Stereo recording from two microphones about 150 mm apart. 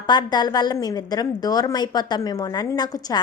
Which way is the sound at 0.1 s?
30° left (ahead or behind).